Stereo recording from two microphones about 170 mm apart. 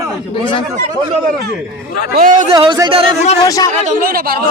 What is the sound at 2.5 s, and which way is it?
Speech, 30° right (ahead or behind).